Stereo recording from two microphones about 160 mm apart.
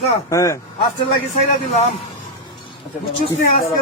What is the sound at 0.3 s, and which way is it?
Speech, 20° left (ahead or behind).